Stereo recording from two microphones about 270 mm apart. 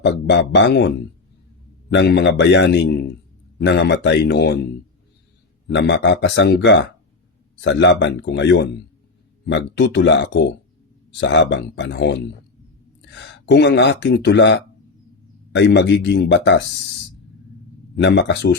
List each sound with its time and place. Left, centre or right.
0.0 s a man's voice: left
5.7 s a man's voice: left
17.9 s a man's voice: left